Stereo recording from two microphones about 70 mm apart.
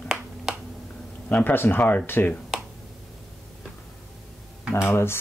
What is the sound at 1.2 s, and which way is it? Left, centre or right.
Speech, left.